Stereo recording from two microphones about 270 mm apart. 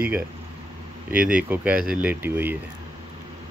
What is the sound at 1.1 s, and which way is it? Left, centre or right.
Speech, centre.